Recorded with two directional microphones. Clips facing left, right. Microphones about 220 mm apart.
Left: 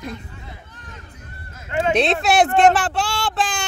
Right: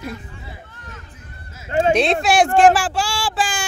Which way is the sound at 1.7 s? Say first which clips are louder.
Right 4 dB; 35° right (ahead or behind).